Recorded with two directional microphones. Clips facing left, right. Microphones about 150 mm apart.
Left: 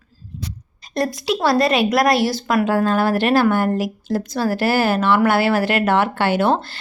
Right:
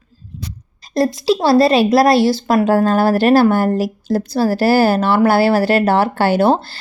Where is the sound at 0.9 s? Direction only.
30° right (ahead or behind).